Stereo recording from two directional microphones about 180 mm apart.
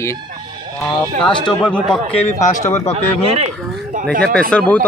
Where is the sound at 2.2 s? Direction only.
45° left (ahead or behind).